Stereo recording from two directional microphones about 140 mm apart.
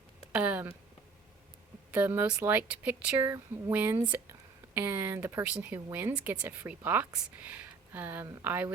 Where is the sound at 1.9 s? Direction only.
15° right (ahead or behind).